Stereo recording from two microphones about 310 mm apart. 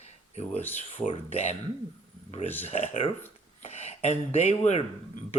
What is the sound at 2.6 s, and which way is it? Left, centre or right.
Speech, centre.